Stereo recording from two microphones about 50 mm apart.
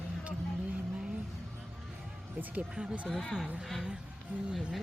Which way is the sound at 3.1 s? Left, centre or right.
Centre.